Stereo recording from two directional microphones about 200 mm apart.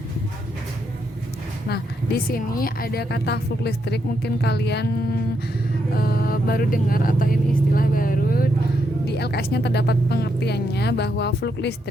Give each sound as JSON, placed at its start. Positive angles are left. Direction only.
{"t": 2.3, "sound": "a woman's voice", "side_deg": 45}
{"t": 6.0, "sound": "a woman's voice", "side_deg": 45}